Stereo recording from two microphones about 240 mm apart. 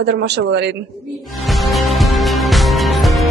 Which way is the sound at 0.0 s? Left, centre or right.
Right.